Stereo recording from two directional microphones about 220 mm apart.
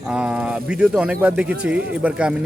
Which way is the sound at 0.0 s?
5° right (ahead or behind).